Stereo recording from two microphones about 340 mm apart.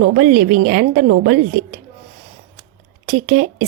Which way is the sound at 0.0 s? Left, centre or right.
Right.